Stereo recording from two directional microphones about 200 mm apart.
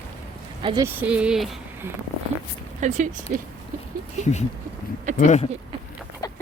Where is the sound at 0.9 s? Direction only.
5° right (ahead or behind).